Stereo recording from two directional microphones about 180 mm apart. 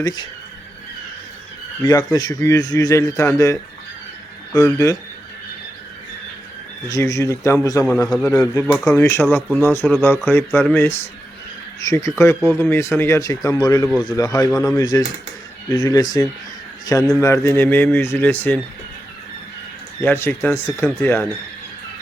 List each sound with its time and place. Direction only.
0.0 s a man's voice: 25° left (ahead or behind)
1.8 s a man's voice: 25° left (ahead or behind)
6.8 s speech: 20° left (ahead or behind)
7.9 s a man's voice: 5° left (ahead or behind)
8.2 s a man's voice: 20° left (ahead or behind)
20.0 s speech: 15° left (ahead or behind)